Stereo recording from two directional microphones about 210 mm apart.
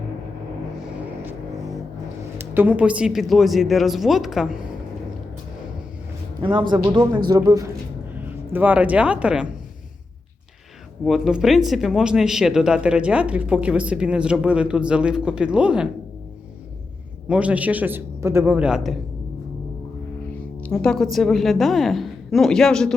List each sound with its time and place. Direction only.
2.4 s speech: 10° right (ahead or behind)
6.8 s music: 20° right (ahead or behind)
7.3 s a man's voice: 15° right (ahead or behind)
11.0 s speech: centre (ahead or behind)
17.2 s a man's voice: 5° right (ahead or behind)
20.3 s a woman's voice: 5° left (ahead or behind)